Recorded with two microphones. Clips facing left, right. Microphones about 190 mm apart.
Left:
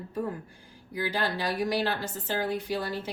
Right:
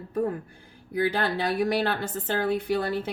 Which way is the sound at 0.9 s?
55° right (ahead or behind).